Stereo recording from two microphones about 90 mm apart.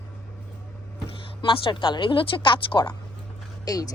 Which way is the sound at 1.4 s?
65° left (ahead or behind).